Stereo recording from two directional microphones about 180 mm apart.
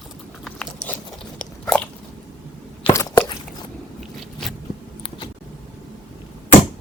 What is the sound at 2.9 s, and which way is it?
Biting, 15° left (ahead or behind).